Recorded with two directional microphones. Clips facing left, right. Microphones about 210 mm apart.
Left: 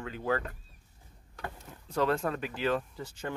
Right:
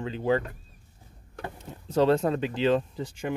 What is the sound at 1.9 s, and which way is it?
Speech, 25° right (ahead or behind).